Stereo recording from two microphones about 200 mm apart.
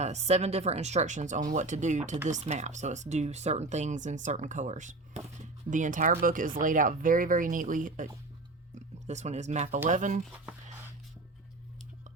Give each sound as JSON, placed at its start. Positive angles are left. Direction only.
{"t": 0.0, "sound": "speech", "side_deg": -35}